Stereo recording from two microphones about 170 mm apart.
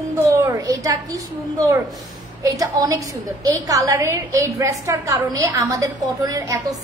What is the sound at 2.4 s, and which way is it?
A woman's voice, 20° right (ahead or behind).